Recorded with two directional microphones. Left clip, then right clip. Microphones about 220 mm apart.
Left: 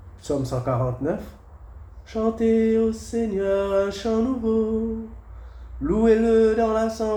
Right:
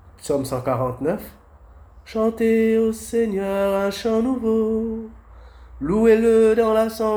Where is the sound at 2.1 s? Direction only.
35° right (ahead or behind).